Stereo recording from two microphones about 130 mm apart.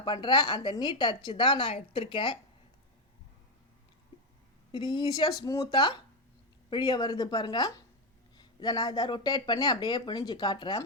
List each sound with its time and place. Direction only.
0.0 s speech: 35° left (ahead or behind)
4.7 s speech: 35° left (ahead or behind)